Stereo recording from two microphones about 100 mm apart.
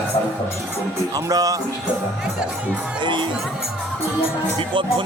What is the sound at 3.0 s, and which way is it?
Speech, 50° right (ahead or behind).